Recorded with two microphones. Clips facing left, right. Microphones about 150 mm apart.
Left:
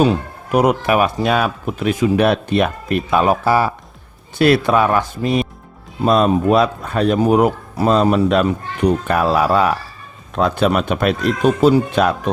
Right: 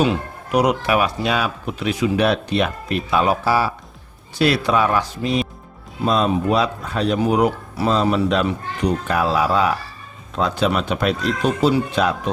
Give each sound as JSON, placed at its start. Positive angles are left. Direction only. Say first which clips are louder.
{"t": 0.5, "sound": "speech", "louder": "left 3 dB", "side_deg": 50}